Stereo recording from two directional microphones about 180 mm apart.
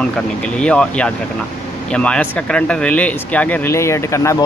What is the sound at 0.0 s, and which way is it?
Speech, 5° left (ahead or behind).